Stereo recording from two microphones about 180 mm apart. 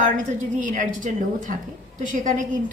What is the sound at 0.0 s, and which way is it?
A woman's voice, 45° right (ahead or behind).